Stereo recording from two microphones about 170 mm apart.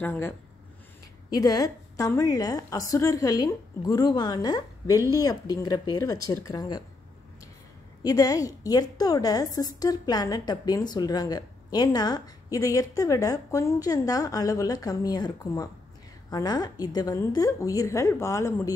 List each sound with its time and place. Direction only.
0.0 s a woman's voice: 10° left (ahead or behind)
8.0 s a woman's voice: 20° left (ahead or behind)